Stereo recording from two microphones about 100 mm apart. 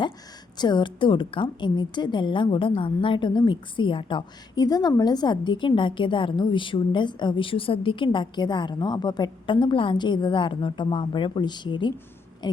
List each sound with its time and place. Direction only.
0.5 s a woman's voice: 50° left (ahead or behind)